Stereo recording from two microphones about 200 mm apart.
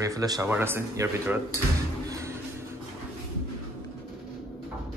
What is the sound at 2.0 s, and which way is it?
Music, 15° right (ahead or behind).